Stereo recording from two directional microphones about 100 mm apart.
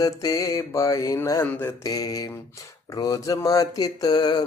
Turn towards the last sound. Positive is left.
turn(degrees=45)  # may be behind; listen again after turning